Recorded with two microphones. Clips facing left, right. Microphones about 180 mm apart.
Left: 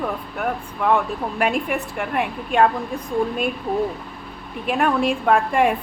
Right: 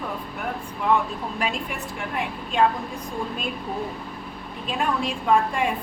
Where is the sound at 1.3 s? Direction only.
60° left (ahead or behind).